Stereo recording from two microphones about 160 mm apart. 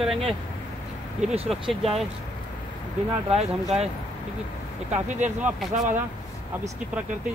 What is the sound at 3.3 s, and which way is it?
Speech, 40° right (ahead or behind).